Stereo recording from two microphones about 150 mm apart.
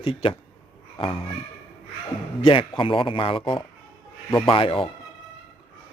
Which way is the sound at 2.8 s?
35° left (ahead or behind).